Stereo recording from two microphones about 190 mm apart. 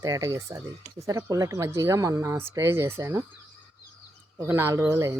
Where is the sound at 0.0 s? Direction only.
15° right (ahead or behind).